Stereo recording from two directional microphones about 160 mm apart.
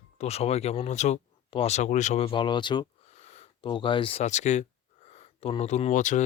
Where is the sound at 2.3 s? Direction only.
30° left (ahead or behind).